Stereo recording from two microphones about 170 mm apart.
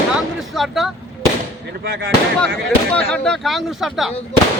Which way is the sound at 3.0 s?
5° left (ahead or behind).